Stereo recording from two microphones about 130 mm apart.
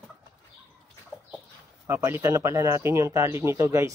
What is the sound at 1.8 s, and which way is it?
Speech, 20° right (ahead or behind).